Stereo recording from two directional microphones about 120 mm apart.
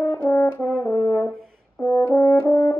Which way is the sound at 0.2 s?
15° left (ahead or behind).